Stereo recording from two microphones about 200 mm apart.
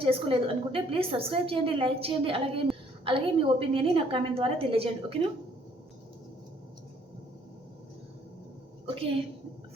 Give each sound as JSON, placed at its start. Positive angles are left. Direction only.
{"t": 0.0, "sound": "a woman's voice", "side_deg": -25}